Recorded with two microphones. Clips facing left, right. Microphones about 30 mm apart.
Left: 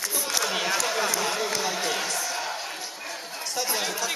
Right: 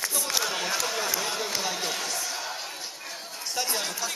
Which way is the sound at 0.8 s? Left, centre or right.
Centre.